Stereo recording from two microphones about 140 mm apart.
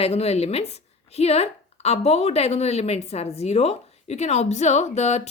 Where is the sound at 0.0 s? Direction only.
50° left (ahead or behind).